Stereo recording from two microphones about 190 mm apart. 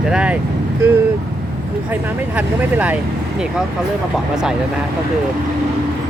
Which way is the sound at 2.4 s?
5° right (ahead or behind).